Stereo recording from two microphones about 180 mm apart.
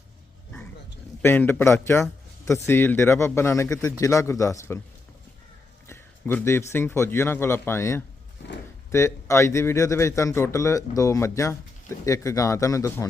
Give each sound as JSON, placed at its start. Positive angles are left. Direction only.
{"t": 1.2, "sound": "a man's voice", "side_deg": 10}
{"t": 5.9, "sound": "a man's voice", "side_deg": 15}